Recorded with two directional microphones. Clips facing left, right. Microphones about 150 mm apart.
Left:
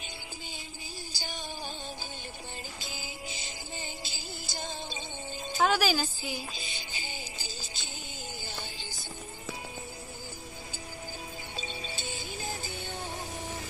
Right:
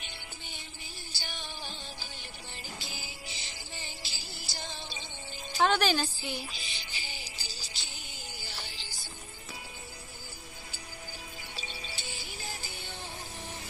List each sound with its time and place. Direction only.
2.8 s music: 20° left (ahead or behind)
5.6 s a woman's voice: 5° left (ahead or behind)
6.5 s music: 20° left (ahead or behind)
11.5 s music: 20° left (ahead or behind)